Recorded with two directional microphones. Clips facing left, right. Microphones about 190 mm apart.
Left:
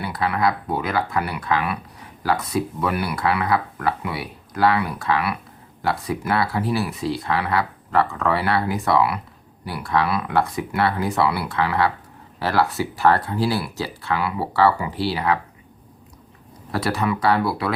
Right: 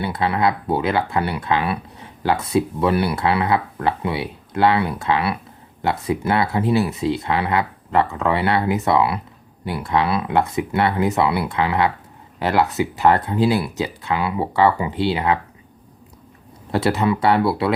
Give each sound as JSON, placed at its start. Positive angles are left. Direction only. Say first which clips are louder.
{"t": 0.0, "sound": "speech", "louder": "right 2 dB", "side_deg": -25}
{"t": 16.7, "sound": "speech", "louder": "right 4 dB", "side_deg": -25}